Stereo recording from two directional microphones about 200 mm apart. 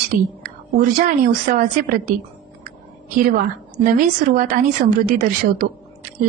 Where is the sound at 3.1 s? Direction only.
45° right (ahead or behind).